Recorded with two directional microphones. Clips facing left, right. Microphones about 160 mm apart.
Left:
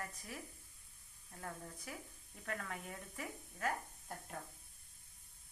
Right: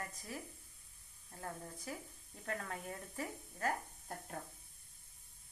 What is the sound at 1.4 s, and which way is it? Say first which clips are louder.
Speech: right 2 dB; 20° right (ahead or behind).